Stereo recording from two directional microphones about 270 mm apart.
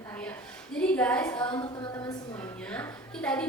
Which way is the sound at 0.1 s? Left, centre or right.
Centre.